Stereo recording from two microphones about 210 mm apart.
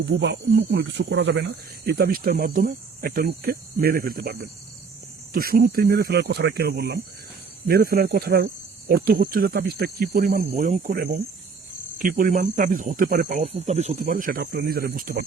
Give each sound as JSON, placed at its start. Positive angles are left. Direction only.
{"t": 0.0, "sound": "speech", "side_deg": -55}